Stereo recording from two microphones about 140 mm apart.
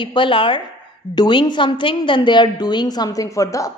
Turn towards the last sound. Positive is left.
turn(degrees=25)  # may be behind; listen again after turning